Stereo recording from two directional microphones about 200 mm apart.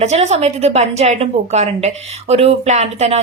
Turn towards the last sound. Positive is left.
turn(degrees=-30)  # may be behind; listen again after turning